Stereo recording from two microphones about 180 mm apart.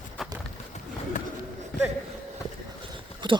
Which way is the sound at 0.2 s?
Centre (ahead or behind).